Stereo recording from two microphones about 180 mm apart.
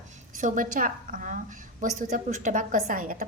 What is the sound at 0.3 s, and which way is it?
A woman's voice, 45° right (ahead or behind).